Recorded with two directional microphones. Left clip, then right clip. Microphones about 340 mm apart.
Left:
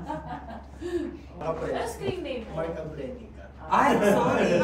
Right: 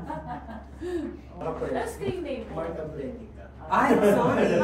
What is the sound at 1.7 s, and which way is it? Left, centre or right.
Speech, centre.